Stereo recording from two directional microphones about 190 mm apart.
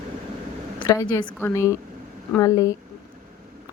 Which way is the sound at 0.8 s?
20° left (ahead or behind).